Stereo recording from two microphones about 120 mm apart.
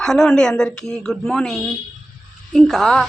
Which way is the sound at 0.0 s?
5° left (ahead or behind).